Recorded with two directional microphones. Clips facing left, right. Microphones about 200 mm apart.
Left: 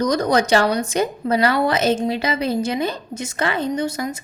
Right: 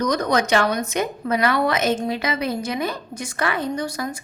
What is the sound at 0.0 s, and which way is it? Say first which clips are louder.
A woman's voice: left 3 dB; 30° left (ahead or behind).